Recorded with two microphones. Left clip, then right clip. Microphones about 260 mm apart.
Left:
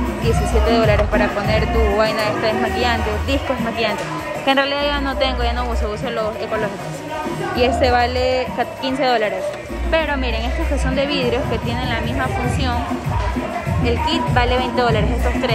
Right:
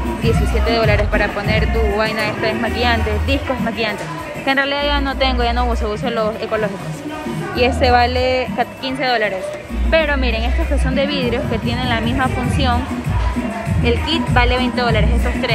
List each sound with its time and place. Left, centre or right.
0.2 s speech: centre
4.5 s speech: centre
13.8 s speech: centre